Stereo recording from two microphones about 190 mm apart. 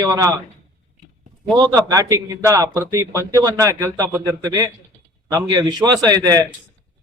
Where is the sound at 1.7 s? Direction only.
20° right (ahead or behind).